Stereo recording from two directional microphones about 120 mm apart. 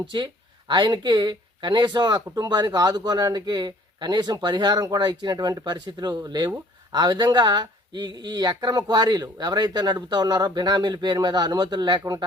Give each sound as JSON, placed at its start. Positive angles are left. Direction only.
{"t": 0.1, "sound": "speech", "side_deg": -40}